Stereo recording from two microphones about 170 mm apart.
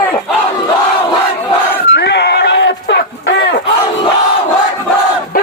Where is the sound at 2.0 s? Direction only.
85° left.